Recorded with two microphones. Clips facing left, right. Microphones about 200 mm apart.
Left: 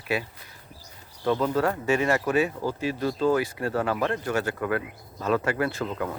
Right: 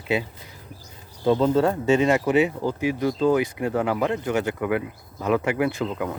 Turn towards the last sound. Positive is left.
turn(degrees=-5)  # may be behind; listen again after turning